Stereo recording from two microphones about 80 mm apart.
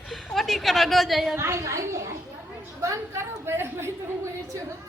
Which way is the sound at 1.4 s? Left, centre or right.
Right.